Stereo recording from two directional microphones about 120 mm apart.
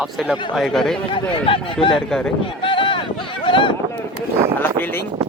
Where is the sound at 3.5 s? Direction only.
45° left (ahead or behind).